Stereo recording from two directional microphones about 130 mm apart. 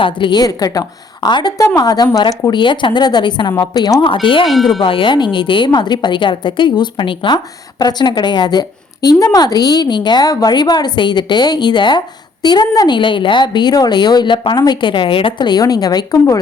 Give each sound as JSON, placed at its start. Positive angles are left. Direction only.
{"t": 0.0, "sound": "a woman's voice", "side_deg": 35}
{"t": 4.4, "sound": "speech", "side_deg": 0}
{"t": 4.8, "sound": "a woman's voice", "side_deg": 45}